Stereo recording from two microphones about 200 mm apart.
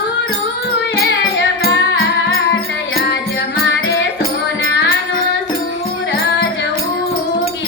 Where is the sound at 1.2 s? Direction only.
65° left (ahead or behind).